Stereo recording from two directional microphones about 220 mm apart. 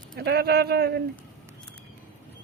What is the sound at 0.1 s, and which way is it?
Speech, 45° right (ahead or behind).